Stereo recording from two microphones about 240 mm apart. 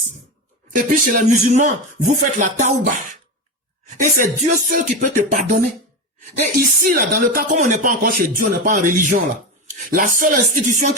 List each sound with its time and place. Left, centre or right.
0.7 s speech: right